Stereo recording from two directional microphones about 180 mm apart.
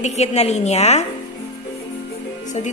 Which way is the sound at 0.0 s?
40° left (ahead or behind).